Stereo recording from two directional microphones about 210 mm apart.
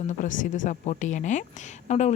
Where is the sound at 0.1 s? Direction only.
35° left (ahead or behind).